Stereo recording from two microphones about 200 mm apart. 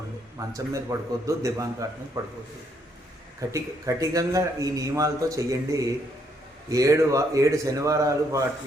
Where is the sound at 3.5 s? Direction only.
15° right (ahead or behind).